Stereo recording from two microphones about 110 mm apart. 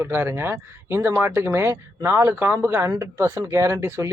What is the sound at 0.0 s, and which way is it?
Speech, 20° right (ahead or behind).